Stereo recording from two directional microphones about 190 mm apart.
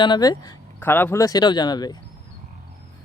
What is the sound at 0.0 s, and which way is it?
Speech, 20° left (ahead or behind).